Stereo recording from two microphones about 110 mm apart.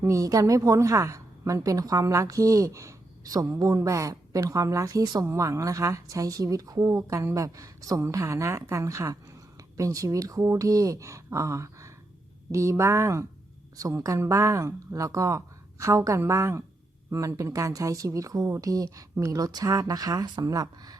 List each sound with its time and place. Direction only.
0.0 s a woman's voice: 30° right (ahead or behind)